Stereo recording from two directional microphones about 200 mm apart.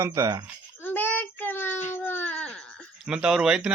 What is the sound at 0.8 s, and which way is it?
Child singing, 10° left (ahead or behind).